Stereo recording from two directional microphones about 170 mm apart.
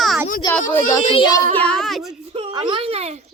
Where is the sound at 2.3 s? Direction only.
30° right (ahead or behind).